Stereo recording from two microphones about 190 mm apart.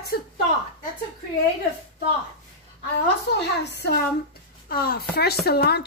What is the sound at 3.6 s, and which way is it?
A woman's voice, 60° left (ahead or behind).